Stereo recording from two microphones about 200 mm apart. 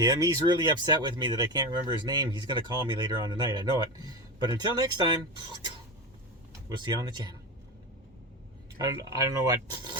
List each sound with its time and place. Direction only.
0.0 s speech: 20° right (ahead or behind)
6.7 s speech: 20° right (ahead or behind)
8.8 s speech: 15° right (ahead or behind)